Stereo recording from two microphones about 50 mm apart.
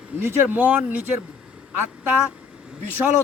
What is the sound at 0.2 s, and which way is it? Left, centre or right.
Speech, right.